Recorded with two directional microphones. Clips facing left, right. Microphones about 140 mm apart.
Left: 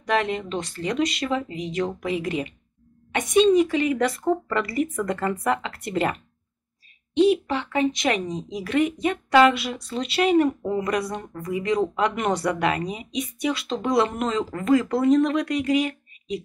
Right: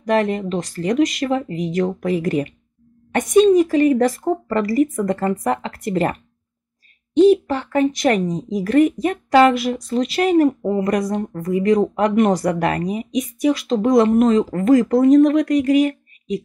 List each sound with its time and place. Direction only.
0.0 s speech: 45° right (ahead or behind)
7.2 s speech: 45° right (ahead or behind)